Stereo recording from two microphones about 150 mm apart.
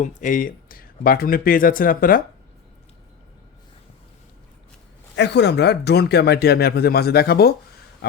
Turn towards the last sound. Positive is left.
turn(degrees=90)